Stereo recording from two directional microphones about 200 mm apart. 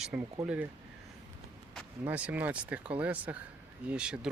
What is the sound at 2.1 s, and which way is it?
Speech, 5° right (ahead or behind).